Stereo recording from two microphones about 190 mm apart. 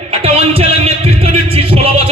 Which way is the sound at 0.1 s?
30° right (ahead or behind).